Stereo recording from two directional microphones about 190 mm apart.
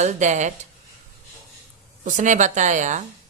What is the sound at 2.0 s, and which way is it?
Speech, 40° right (ahead or behind).